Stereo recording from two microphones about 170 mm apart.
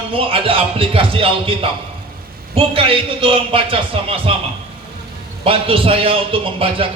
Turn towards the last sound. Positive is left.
turn(degrees=-30)  # may be behind; listen again after turning